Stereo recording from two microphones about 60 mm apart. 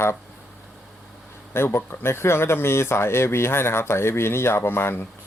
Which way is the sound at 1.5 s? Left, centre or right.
Left.